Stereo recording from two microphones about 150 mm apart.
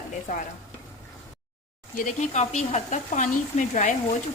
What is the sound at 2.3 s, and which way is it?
Speech, 50° left (ahead or behind).